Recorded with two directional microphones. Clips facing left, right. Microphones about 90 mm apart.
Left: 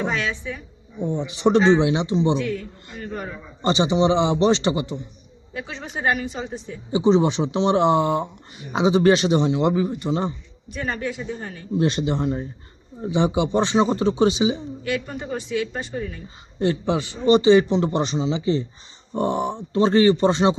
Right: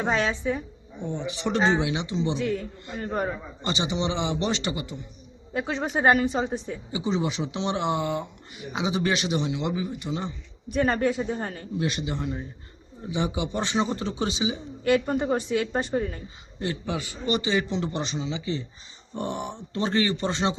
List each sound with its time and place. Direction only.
0.1 s a woman's voice: 35° right (ahead or behind)
1.0 s speech: 20° left (ahead or behind)
1.7 s a man's voice: 30° left (ahead or behind)
2.4 s a man's voice: 25° right (ahead or behind)
3.6 s a man's voice: 25° left (ahead or behind)
5.5 s a woman's voice: 40° right (ahead or behind)
6.9 s a man's voice: 30° left (ahead or behind)
10.7 s a man's voice: 45° right (ahead or behind)
11.8 s a man's voice: 35° left (ahead or behind)
14.8 s a woman's voice: 40° right (ahead or behind)
16.6 s a man's voice: 30° left (ahead or behind)